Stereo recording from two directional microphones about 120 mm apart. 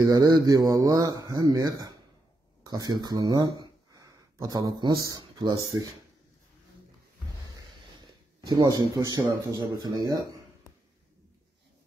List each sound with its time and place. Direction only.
0.0 s a man's voice: 30° right (ahead or behind)
8.5 s speech: 30° right (ahead or behind)